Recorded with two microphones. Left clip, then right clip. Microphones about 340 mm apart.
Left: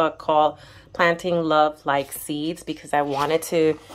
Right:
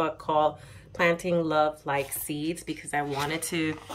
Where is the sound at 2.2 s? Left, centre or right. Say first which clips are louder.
Left 4 dB; centre.